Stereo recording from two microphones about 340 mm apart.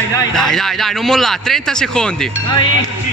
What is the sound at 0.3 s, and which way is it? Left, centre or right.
A man's voice, centre.